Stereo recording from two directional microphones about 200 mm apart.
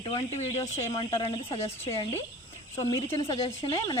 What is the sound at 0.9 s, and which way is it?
Speech, 20° left (ahead or behind).